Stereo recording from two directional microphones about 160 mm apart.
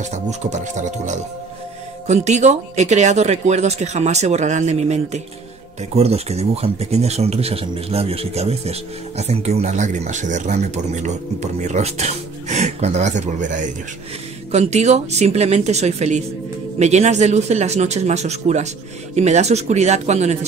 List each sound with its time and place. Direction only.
0.0 s speech: 50° right (ahead or behind)